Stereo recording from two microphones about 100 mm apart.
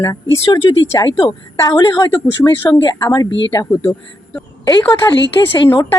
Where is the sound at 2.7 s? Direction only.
50° left (ahead or behind).